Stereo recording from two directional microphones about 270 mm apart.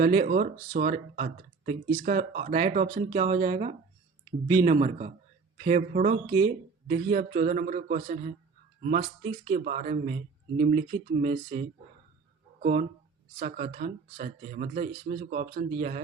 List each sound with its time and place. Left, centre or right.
0.0 s speech: right
13.4 s speech: right